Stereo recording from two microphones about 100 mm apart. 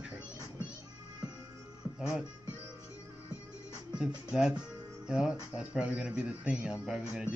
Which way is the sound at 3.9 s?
10° right (ahead or behind).